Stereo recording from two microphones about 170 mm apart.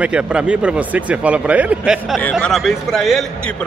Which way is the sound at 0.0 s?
5° right (ahead or behind).